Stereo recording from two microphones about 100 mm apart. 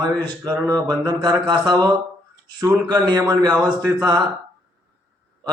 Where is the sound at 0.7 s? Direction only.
40° right (ahead or behind).